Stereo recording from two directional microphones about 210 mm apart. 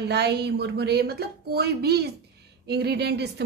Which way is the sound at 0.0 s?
50° right (ahead or behind).